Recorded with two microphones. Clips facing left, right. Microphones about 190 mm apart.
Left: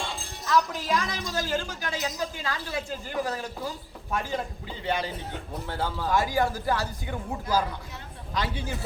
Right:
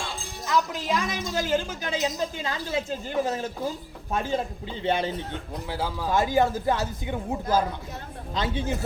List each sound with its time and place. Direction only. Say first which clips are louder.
0.4 s a woman's voice: even; 20° right (ahead or behind)
5.6 s speech: even; 5° right (ahead or behind)
6.1 s a woman's voice: right 3 dB; 25° right (ahead or behind)
8.4 s a woman's voice: right 3 dB; 25° right (ahead or behind)